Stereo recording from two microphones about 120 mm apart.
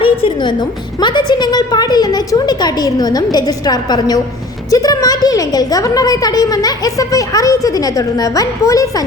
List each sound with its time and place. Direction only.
0.0 s a woman's voice: 45° left (ahead or behind); by 9.0 s 30° left (ahead or behind)